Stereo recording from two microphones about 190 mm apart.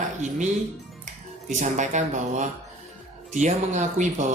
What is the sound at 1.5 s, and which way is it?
Speech, 40° right (ahead or behind).